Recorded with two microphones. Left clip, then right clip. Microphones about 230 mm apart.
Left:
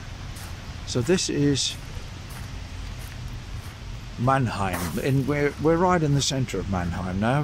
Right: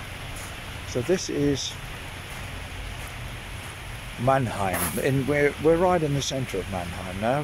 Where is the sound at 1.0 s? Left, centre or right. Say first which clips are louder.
Left 2 dB; centre.